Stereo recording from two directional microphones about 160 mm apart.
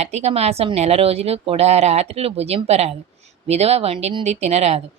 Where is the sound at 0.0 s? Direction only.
45° right (ahead or behind).